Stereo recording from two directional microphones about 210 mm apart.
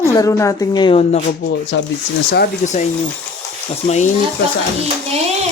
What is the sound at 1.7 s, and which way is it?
Speech, 60° left (ahead or behind).